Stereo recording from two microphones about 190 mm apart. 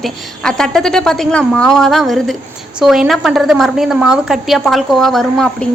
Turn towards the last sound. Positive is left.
turn(degrees=0)  # may be behind; listen again after turning